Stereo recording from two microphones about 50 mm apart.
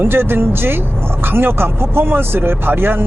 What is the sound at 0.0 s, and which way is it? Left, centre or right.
Speech, right.